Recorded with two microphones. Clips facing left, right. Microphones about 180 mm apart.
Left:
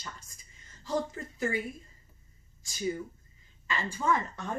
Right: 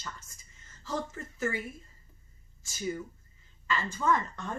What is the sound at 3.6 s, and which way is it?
Speech, 15° left (ahead or behind).